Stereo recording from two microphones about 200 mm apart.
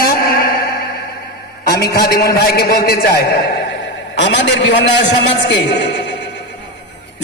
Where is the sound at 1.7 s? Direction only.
50° left (ahead or behind).